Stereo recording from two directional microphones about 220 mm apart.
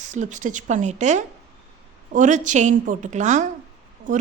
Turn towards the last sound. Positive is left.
turn(degrees=-35)  # may be behind; listen again after turning